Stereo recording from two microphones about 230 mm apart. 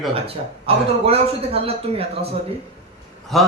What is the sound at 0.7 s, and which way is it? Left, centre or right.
Speech, right.